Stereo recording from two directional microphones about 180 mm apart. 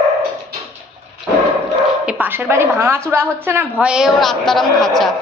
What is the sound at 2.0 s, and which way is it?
A woman's voice, 10° right (ahead or behind).